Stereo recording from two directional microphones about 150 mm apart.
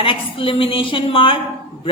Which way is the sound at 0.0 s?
35° left (ahead or behind).